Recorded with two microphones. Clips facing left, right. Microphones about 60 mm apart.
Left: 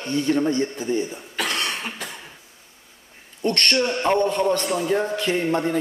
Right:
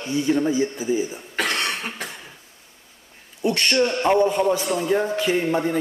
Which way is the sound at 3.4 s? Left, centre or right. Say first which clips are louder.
Right 1 dB; centre.